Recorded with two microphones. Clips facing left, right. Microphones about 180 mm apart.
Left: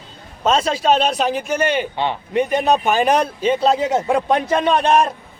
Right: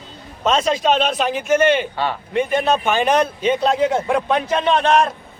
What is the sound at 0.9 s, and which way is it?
A man's voice, 40° left (ahead or behind).